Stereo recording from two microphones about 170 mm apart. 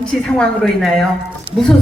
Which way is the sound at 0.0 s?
5° left (ahead or behind).